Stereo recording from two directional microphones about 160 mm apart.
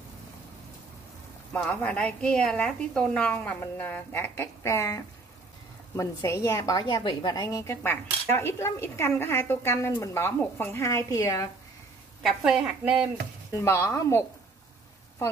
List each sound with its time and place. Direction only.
1.5 s a woman's voice: 10° left (ahead or behind)
12.2 s a woman's voice: centre (ahead or behind)
13.6 s a woman's voice: 15° left (ahead or behind)